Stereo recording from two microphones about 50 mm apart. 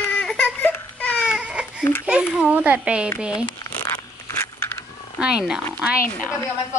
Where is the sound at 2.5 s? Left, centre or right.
Right.